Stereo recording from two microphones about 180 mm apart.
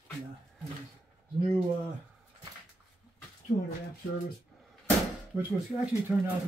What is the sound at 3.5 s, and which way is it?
Speech, 35° left (ahead or behind).